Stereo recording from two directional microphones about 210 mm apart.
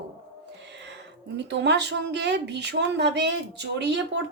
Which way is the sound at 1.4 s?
55° right (ahead or behind).